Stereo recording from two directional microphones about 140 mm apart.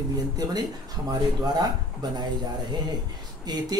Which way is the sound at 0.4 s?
30° right (ahead or behind).